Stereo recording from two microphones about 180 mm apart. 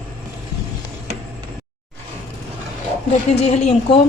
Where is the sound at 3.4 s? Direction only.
35° left (ahead or behind).